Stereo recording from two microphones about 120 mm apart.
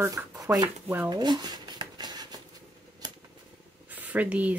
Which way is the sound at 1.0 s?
35° right (ahead or behind).